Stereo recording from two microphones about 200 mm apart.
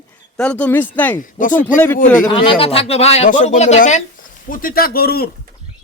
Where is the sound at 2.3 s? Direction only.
30° left (ahead or behind); by 5.3 s 50° left (ahead or behind).